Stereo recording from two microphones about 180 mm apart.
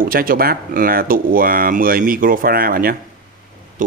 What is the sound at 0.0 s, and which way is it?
Speech, 55° right (ahead or behind).